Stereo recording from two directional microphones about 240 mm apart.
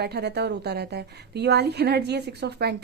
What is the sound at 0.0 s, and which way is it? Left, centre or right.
A woman's voice, right.